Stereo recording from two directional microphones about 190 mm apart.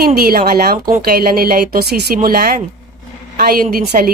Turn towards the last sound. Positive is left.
turn(degrees=-50)  # may be behind; listen again after turning